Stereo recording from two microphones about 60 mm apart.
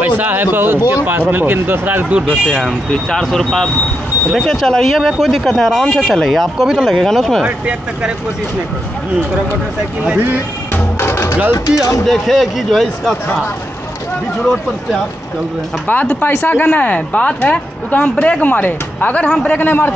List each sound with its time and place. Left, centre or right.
0.0 s speech: right
2.2 s speech: centre
6.6 s speech: centre
7.0 s speech: centre
7.4 s speech: centre
10.1 s speech: right
11.0 s music: left
11.5 s speech: left
12.1 s speech: centre
15.9 s speech: left
19.6 s a man's voice: left